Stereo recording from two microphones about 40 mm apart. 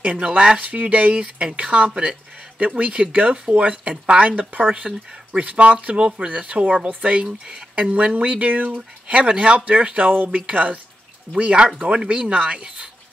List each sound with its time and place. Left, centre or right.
0.0 s speech: right
0.6 s speech: right
4.3 s speech: right
9.0 s speech: right
10.1 s speech: right